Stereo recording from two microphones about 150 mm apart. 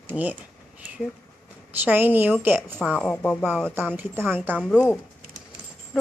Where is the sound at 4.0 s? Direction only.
15° right (ahead or behind).